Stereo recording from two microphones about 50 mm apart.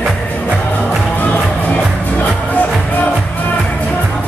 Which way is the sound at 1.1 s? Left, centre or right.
Left.